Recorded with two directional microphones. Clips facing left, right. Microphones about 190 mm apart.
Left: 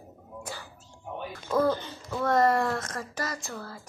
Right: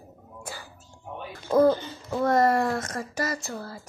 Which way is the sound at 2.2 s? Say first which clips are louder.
Right 2 dB; 10° right (ahead or behind).